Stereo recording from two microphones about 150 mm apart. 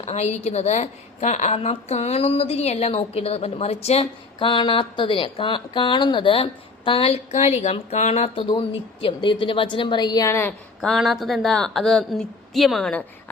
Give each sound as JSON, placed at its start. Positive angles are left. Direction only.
{"t": 0.0, "sound": "a woman's voice", "side_deg": 45}
{"t": 10.8, "sound": "a woman's voice", "side_deg": 0}